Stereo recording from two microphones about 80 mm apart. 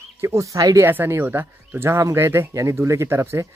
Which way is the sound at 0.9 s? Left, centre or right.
Right.